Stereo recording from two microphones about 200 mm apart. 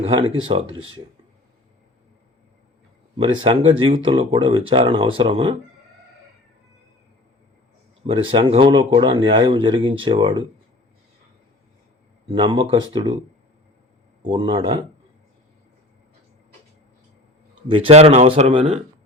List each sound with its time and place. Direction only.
0.0 s speech: 30° right (ahead or behind)
3.2 s speech: 25° right (ahead or behind)
8.0 s speech: 25° right (ahead or behind)
12.3 s speech: 25° right (ahead or behind)
14.2 s speech: 25° right (ahead or behind)
17.7 s speech: 25° right (ahead or behind)